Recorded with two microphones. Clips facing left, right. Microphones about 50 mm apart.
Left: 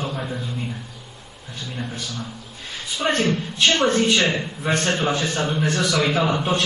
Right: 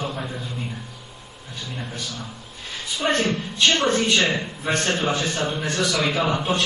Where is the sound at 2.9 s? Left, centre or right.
Left.